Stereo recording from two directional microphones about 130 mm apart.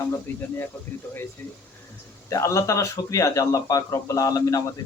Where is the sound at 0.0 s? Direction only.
20° left (ahead or behind).